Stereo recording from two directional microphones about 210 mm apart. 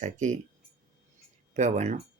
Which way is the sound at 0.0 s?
35° right (ahead or behind).